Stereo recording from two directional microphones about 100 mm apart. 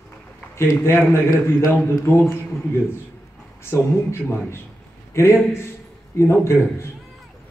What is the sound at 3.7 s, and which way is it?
A man's voice, 25° left (ahead or behind).